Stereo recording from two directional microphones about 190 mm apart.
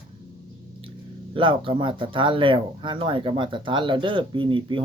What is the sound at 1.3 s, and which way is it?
Speech, 25° right (ahead or behind).